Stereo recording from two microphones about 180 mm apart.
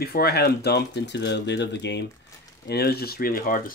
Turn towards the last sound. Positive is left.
turn(degrees=50)  # may be behind; listen again after turning